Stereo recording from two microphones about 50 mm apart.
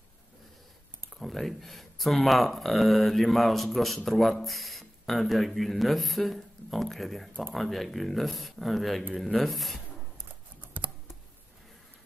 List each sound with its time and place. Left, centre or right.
1.1 s speech: centre
10.6 s computer keyboard: right